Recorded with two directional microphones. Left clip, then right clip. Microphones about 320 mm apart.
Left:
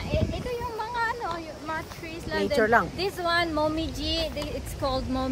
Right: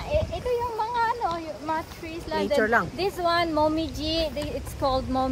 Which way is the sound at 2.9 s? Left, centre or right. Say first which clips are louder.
Right 2 dB; centre.